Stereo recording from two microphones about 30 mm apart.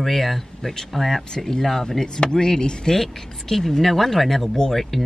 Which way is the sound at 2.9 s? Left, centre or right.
Centre.